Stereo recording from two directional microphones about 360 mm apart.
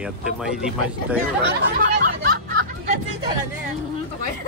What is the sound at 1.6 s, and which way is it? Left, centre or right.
Hubbub, right.